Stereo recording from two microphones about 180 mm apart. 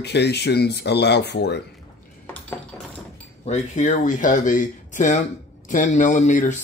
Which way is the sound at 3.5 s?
45° left (ahead or behind).